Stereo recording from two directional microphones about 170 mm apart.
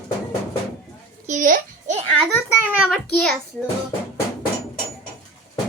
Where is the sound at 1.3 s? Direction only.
50° right (ahead or behind).